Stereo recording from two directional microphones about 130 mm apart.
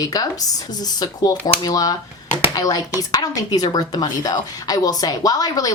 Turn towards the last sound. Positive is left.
turn(degrees=30)  # may be behind; listen again after turning